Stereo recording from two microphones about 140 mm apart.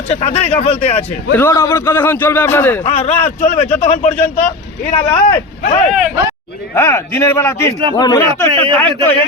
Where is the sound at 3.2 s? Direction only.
55° left (ahead or behind).